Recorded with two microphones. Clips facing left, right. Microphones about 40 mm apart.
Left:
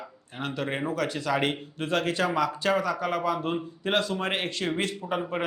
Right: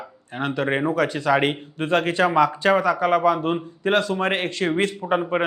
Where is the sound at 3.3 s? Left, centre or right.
Right.